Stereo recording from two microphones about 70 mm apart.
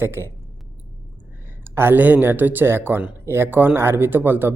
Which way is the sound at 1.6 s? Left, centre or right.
Right.